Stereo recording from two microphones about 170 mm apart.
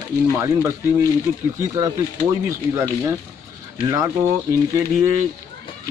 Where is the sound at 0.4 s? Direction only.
15° right (ahead or behind).